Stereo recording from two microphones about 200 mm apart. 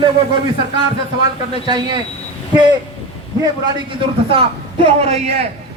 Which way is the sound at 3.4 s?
20° right (ahead or behind).